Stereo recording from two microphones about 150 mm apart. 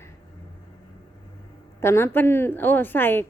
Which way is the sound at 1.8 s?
15° left (ahead or behind).